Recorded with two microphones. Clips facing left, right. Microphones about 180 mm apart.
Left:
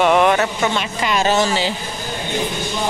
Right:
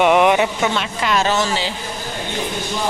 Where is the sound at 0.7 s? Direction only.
5° left (ahead or behind).